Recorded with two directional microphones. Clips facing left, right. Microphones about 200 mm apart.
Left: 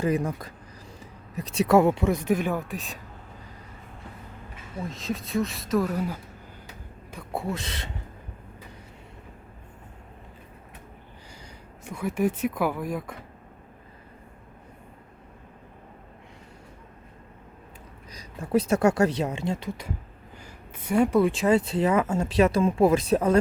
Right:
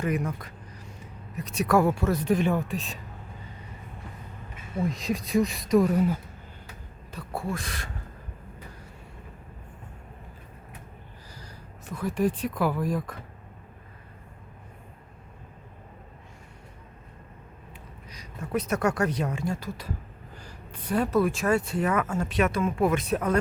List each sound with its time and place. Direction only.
0.0 s speech: 30° left (ahead or behind); by 3.0 s centre (ahead or behind)
4.9 s speech: centre (ahead or behind)
5.7 s speech: 10° right (ahead or behind)
7.1 s speech: 15° left (ahead or behind)
11.9 s speech: 10° left (ahead or behind)
18.1 s speech: 35° left (ahead or behind)
20.8 s speech: 10° left (ahead or behind)
21.2 s speech: 20° left (ahead or behind)